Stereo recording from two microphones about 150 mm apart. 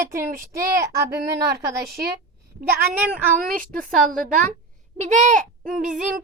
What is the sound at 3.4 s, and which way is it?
Speech, 65° right (ahead or behind).